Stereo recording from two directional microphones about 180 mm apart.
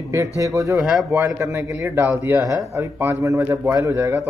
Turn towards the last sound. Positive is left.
turn(degrees=-15)  # may be behind; listen again after turning